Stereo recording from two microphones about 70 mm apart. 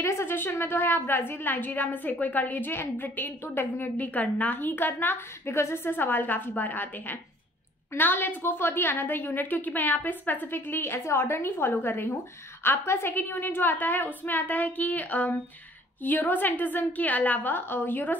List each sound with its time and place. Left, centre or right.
0.0 s a woman's voice: left